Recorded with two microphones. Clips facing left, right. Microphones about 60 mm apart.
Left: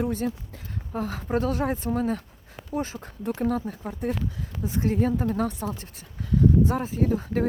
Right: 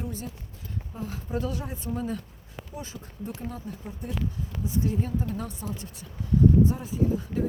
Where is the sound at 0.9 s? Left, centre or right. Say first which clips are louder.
Left 7 dB; left.